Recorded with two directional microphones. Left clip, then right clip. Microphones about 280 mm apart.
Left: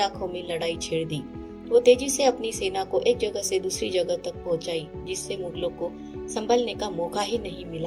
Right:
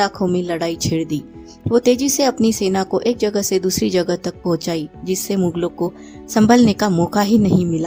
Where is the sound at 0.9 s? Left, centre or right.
Right.